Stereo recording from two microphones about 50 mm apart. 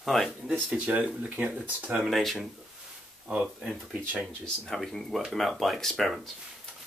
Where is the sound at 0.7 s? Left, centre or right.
Right.